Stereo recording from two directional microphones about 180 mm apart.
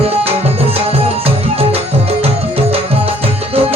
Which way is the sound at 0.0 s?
35° right (ahead or behind).